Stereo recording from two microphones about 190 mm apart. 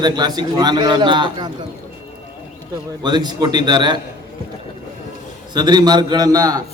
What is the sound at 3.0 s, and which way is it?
A man's voice, 20° right (ahead or behind).